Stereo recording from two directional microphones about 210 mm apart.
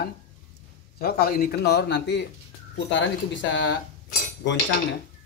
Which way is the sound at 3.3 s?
60° left (ahead or behind).